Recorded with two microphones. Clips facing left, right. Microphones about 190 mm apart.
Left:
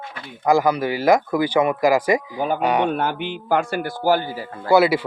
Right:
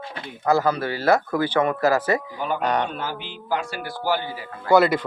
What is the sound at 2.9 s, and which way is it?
Speech, 60° left (ahead or behind).